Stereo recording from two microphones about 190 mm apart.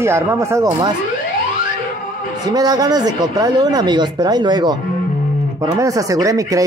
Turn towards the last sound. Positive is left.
turn(degrees=-15)  # may be behind; listen again after turning